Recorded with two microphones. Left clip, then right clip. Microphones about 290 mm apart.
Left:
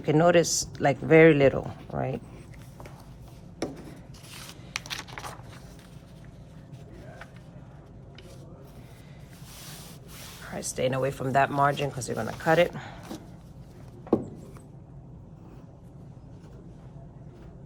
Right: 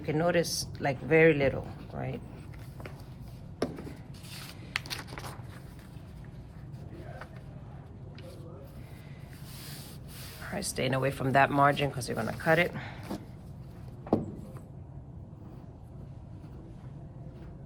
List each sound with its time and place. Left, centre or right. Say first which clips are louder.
0.0 s speech: left 7 dB; centre
4.9 s a sound: left 3 dB; centre
10.4 s speech: left 4 dB; centre